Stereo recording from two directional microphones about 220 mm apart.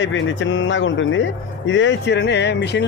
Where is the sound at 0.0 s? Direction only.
55° left (ahead or behind).